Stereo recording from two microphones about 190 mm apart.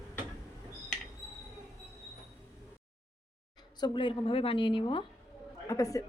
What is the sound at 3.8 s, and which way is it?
A woman's voice, 25° left (ahead or behind).